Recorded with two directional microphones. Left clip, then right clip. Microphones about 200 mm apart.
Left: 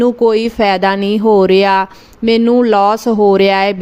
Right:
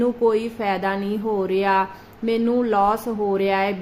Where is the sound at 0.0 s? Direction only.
45° left (ahead or behind).